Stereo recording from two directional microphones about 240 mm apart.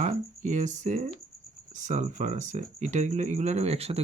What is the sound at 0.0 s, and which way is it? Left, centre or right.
Speech, right.